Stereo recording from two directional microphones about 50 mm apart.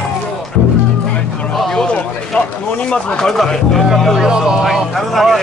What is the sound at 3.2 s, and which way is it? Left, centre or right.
Speech, centre.